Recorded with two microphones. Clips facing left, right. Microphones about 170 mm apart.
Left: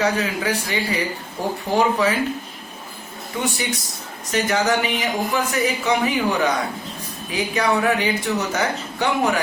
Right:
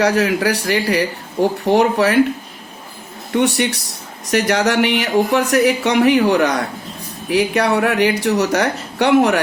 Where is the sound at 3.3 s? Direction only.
70° right (ahead or behind).